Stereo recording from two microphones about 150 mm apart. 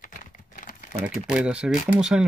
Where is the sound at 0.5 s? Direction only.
60° left (ahead or behind).